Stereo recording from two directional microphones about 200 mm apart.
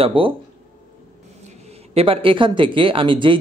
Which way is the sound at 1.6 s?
30° right (ahead or behind).